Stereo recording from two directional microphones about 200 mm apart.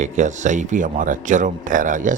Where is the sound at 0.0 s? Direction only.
35° right (ahead or behind).